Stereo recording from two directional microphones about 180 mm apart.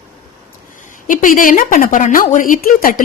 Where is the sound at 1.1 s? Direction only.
50° left (ahead or behind).